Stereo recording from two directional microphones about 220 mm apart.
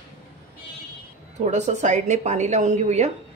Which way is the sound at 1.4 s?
35° right (ahead or behind).